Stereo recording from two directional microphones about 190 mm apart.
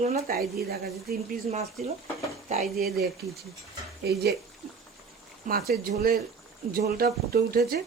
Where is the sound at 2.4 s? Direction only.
45° right (ahead or behind).